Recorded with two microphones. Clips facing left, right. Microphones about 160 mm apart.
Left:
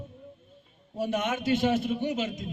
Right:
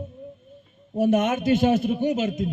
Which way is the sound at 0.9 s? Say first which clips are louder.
Right 8 dB; 50° right (ahead or behind).